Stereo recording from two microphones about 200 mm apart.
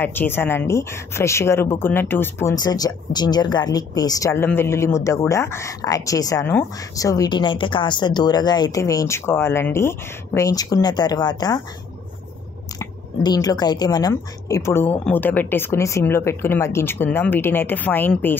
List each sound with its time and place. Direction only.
0.0 s a woman's voice: 10° left (ahead or behind)
12.7 s a woman's voice: 20° left (ahead or behind)